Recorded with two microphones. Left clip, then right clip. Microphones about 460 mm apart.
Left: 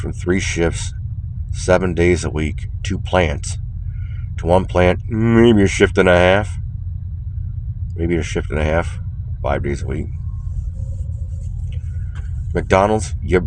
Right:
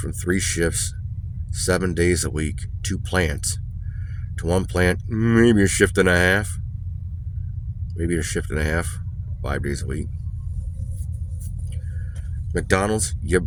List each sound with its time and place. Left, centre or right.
0.0 s speech: right
7.9 s speech: right
12.5 s speech: right